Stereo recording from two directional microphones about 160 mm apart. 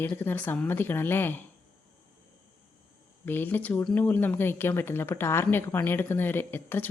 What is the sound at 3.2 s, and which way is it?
A woman's voice, 10° left (ahead or behind).